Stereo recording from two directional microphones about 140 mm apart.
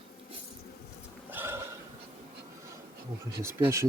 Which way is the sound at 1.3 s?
15° right (ahead or behind).